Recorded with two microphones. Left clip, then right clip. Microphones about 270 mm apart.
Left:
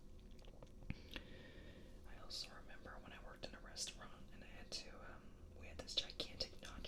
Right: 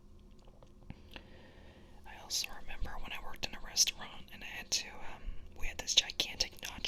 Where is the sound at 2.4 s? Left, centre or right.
Right.